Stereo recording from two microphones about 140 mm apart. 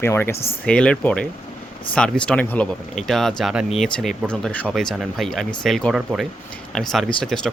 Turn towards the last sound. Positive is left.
turn(degrees=5)  # may be behind; listen again after turning